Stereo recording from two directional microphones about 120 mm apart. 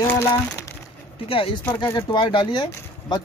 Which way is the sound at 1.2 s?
50° left (ahead or behind).